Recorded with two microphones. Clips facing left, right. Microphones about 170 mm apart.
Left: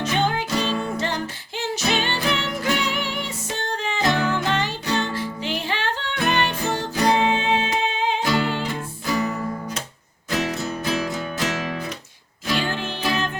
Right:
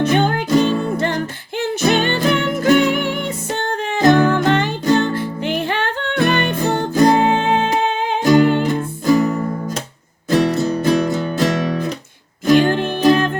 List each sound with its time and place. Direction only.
0.0 s music: 55° right (ahead or behind)
10.2 s music: 40° right (ahead or behind)
12.5 s music: 50° right (ahead or behind)